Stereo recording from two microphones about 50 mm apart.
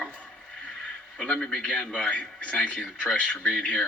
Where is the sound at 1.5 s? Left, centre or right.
Centre.